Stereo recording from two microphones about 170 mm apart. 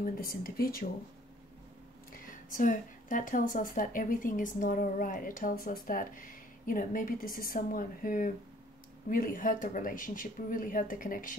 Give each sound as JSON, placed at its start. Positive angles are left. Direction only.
{"t": 0.0, "sound": "speech", "side_deg": 55}
{"t": 2.1, "sound": "speech", "side_deg": 50}